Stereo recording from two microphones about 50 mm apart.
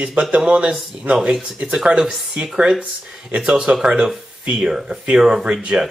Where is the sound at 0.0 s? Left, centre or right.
Right.